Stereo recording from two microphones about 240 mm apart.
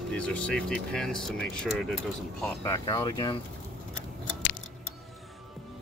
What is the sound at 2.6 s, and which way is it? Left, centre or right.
Speech, centre.